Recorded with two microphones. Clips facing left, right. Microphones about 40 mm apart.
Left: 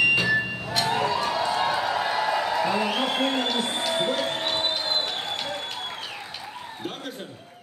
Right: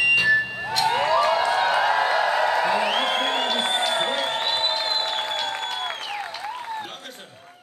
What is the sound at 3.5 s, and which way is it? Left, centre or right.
Crowd, right.